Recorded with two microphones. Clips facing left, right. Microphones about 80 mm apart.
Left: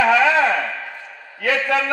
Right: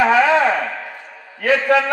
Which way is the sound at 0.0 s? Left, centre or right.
Right.